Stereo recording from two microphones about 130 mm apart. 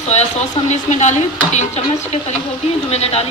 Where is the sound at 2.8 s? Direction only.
50° left (ahead or behind).